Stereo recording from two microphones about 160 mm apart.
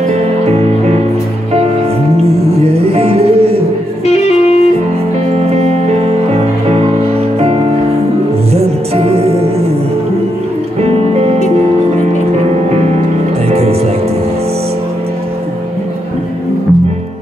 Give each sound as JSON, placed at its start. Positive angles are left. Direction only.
{"t": 0.5, "sound": "music", "side_deg": -40}
{"t": 2.1, "sound": "music", "side_deg": -40}
{"t": 4.0, "sound": "music", "side_deg": 40}
{"t": 5.5, "sound": "music", "side_deg": -40}
{"t": 8.5, "sound": "music", "side_deg": -40}
{"t": 10.8, "sound": "music", "side_deg": -40}
{"t": 12.4, "sound": "music", "side_deg": -40}